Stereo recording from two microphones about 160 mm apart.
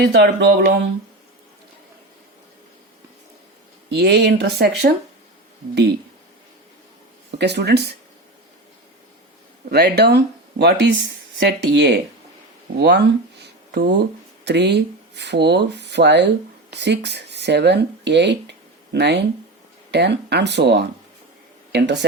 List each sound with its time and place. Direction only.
0.0 s speech: 90° right
3.8 s speech: 90° right
7.3 s speech: 90° right
9.6 s speech: 85° right
13.7 s a sound: 90° right
14.4 s speech: 90° right